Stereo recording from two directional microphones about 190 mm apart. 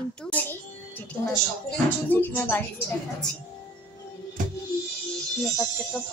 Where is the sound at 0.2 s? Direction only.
10° left (ahead or behind).